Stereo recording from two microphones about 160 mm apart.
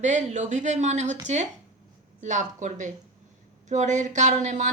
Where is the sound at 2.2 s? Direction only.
50° right (ahead or behind).